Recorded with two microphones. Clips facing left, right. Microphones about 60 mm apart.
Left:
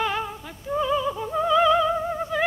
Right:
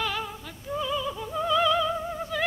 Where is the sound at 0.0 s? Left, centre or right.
Left.